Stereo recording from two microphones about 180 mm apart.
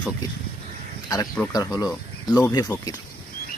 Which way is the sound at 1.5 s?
20° left (ahead or behind).